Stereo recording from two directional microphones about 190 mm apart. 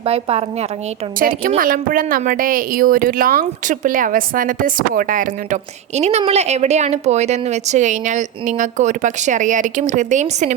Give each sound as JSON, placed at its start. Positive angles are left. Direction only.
{"t": 0.0, "sound": "speech", "side_deg": -30}
{"t": 1.3, "sound": "speech", "side_deg": -45}
{"t": 6.0, "sound": "speech", "side_deg": -35}